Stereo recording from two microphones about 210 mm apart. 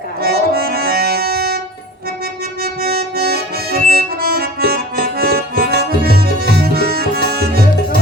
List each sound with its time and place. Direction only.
0.2 s accordion: 45° right (ahead or behind)
2.8 s harmonica: 45° right (ahead or behind)